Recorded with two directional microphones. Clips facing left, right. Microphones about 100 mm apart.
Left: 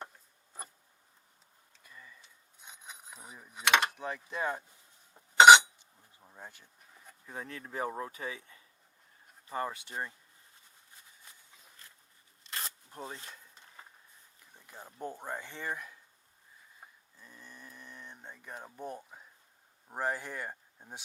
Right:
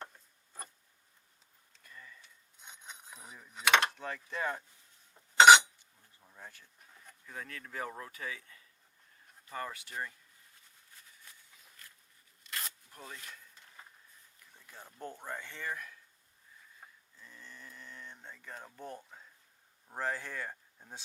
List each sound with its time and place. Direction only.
1.8 s cutlery: 10° left (ahead or behind)
2.6 s a sound: 5° left (ahead or behind)
3.3 s mechanisms: 15° left (ahead or behind)
3.8 s speech: 15° left (ahead or behind)
5.1 s cutlery: 15° left (ahead or behind)
6.0 s bee: 20° left (ahead or behind)
7.3 s speech: 25° left (ahead or behind)
10.9 s a sound: 20° left (ahead or behind)
12.4 s zipper: 30° left (ahead or behind)
14.3 s speech: 20° left (ahead or behind)
16.8 s a sound: 15° left (ahead or behind)
19.9 s speech: 15° left (ahead or behind)